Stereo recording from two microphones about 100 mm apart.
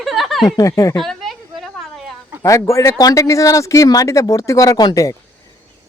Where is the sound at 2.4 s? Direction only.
35° left (ahead or behind).